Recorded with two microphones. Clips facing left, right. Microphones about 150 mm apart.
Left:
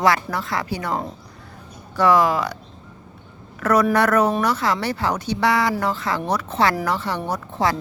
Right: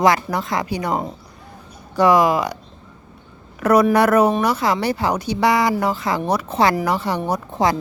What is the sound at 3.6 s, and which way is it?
A woman's voice, 10° right (ahead or behind).